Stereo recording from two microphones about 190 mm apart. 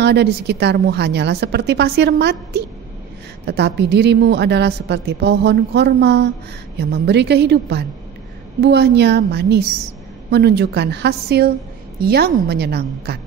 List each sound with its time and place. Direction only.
0.0 s a woman's voice: 60° right (ahead or behind)